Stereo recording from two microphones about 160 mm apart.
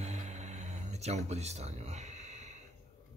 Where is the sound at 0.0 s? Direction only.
45° right (ahead or behind).